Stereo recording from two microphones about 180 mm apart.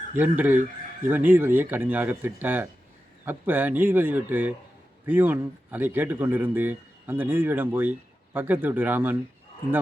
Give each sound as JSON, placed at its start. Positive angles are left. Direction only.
{"t": 0.2, "sound": "a man's voice", "side_deg": -10}